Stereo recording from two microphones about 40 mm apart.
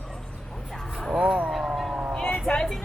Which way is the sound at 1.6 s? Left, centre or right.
Centre.